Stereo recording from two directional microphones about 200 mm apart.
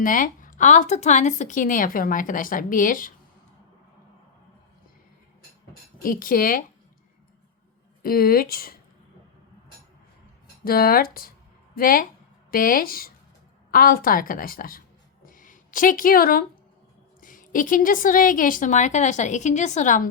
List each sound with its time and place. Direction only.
0.0 s speech: 45° left (ahead or behind)
6.0 s speech: 45° left (ahead or behind)
8.0 s speech: 45° left (ahead or behind)
10.6 s a woman's voice: 45° left (ahead or behind)